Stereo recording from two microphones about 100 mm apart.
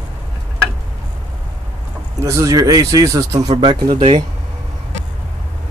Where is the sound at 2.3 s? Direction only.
30° right (ahead or behind).